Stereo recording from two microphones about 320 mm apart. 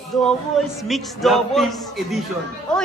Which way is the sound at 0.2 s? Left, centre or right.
Centre.